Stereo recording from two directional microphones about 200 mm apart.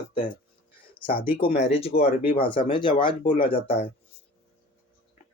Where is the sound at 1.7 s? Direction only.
30° left (ahead or behind).